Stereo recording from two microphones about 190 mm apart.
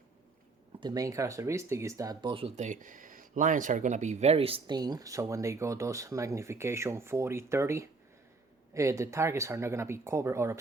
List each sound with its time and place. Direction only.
0.8 s speech: 20° right (ahead or behind)